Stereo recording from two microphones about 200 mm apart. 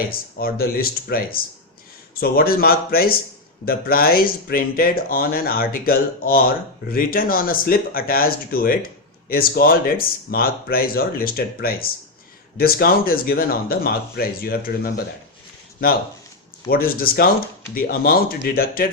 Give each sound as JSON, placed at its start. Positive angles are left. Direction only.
{"t": 0.1, "sound": "speech", "side_deg": 50}
{"t": 16.6, "sound": "speech", "side_deg": 45}